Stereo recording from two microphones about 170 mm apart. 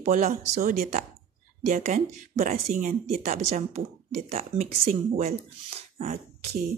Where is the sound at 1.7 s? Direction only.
45° right (ahead or behind).